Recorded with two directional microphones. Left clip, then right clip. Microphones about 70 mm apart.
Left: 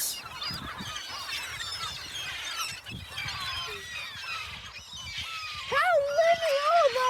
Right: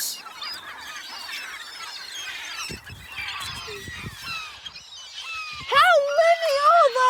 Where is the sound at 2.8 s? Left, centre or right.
Left.